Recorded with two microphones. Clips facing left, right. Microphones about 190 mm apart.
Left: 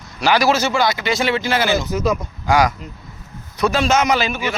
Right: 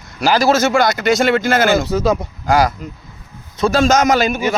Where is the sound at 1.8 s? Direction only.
30° right (ahead or behind).